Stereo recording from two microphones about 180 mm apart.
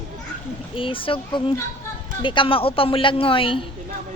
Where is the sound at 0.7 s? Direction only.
30° left (ahead or behind).